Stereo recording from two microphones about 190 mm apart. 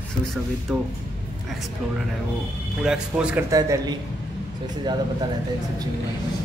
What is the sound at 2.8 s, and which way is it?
Speech, 5° right (ahead or behind).